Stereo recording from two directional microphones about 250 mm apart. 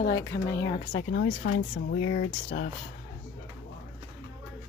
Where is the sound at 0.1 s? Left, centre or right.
Centre.